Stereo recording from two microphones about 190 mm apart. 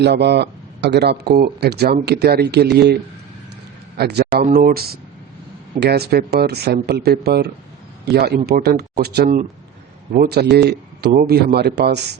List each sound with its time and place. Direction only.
0.0 s speech: 60° right (ahead or behind)
4.4 s speech: 50° right (ahead or behind)